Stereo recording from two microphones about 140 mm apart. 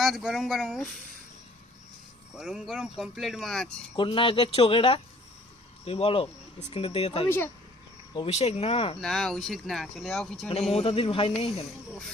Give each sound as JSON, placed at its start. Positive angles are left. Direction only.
{"t": 0.0, "sound": "speech", "side_deg": 0}
{"t": 2.4, "sound": "speech", "side_deg": -5}
{"t": 3.9, "sound": "speech", "side_deg": 35}
{"t": 7.3, "sound": "speech", "side_deg": 15}
{"t": 8.1, "sound": "speech", "side_deg": 45}
{"t": 9.0, "sound": "speech", "side_deg": 0}
{"t": 10.7, "sound": "speech", "side_deg": 45}